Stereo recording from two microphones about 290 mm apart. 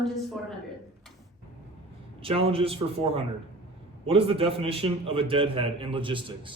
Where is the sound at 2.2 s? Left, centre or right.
Centre.